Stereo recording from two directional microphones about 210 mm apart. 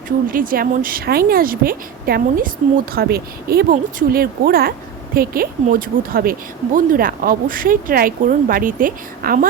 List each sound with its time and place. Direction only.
0.3 s speech: 45° right (ahead or behind)